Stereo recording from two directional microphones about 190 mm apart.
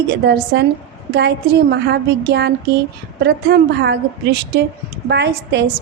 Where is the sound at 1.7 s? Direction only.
60° right (ahead or behind).